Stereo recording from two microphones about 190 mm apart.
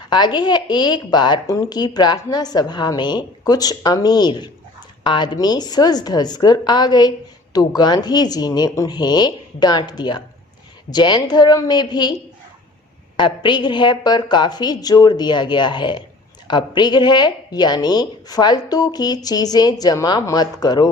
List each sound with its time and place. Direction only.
0.1 s a woman's voice: 25° left (ahead or behind)
13.1 s a woman's voice: 25° left (ahead or behind)